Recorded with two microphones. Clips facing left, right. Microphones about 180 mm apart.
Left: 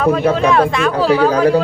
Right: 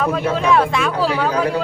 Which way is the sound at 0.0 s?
Centre (ahead or behind).